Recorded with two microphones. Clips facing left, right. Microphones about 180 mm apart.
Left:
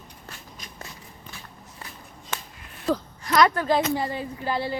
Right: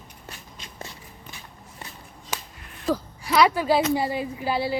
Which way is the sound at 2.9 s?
5° right (ahead or behind).